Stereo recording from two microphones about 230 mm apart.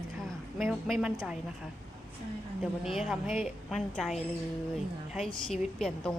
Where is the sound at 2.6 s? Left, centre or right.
Centre.